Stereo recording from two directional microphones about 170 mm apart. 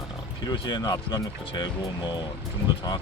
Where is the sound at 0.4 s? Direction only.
25° left (ahead or behind).